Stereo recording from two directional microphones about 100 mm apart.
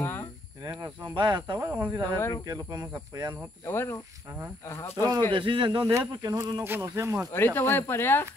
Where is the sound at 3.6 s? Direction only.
25° left (ahead or behind).